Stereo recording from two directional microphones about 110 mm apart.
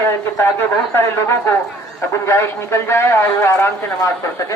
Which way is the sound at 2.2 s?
25° left (ahead or behind).